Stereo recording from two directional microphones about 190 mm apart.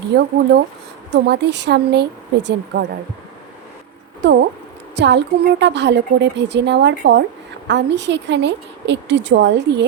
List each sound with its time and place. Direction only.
0.1 s speech: 60° right (ahead or behind)
4.2 s a woman's voice: 65° right (ahead or behind)